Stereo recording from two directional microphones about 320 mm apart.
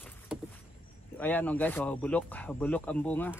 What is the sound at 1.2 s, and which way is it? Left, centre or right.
Speech, centre.